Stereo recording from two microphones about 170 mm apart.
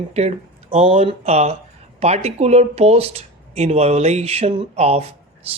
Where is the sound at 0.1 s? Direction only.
40° right (ahead or behind).